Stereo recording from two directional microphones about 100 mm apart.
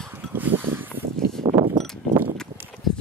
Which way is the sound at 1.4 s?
70° right (ahead or behind).